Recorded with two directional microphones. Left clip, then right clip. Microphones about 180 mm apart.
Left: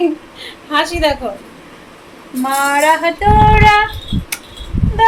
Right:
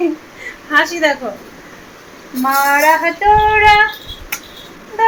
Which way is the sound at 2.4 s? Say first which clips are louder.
Right 1 dB; 15° left (ahead or behind).